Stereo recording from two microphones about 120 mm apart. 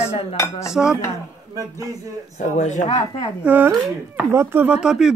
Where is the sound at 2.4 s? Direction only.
90° left.